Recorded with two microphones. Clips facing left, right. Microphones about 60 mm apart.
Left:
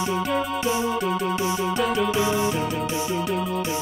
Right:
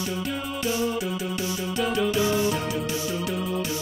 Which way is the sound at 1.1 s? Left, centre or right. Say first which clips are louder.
Left 6 dB; left.